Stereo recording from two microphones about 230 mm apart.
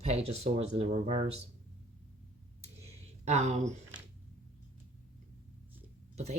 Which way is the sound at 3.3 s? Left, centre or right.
Right.